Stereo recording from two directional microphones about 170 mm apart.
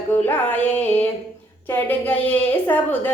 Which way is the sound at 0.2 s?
10° left (ahead or behind).